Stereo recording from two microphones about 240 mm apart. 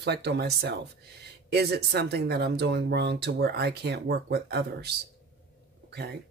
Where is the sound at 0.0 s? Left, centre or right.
Right.